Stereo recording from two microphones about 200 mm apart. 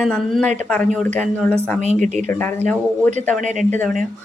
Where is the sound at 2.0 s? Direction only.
35° right (ahead or behind).